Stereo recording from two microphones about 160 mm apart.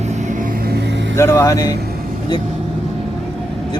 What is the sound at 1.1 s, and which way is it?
Speech, 15° left (ahead or behind).